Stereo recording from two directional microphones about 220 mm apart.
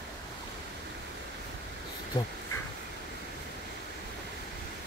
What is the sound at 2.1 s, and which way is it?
Speech, 20° left (ahead or behind).